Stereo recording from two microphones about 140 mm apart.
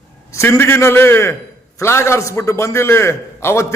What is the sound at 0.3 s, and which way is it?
A man's voice, 20° left (ahead or behind).